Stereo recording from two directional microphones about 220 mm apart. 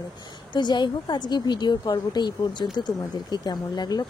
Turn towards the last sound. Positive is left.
turn(degrees=20)  # may be behind; listen again after turning